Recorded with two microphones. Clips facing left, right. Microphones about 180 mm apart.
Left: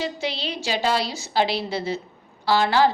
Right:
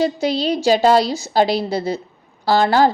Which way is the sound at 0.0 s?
40° right (ahead or behind).